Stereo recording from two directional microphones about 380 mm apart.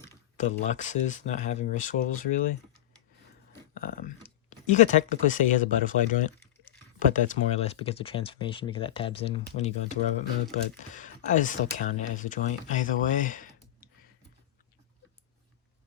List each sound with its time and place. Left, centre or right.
0.0 s speech: left
3.8 s speech: left